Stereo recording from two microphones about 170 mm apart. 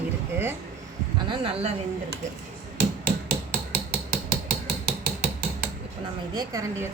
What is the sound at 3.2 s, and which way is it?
Hammer, 60° right (ahead or behind).